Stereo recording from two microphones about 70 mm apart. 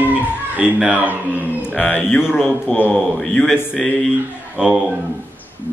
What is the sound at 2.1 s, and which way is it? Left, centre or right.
Speech, centre.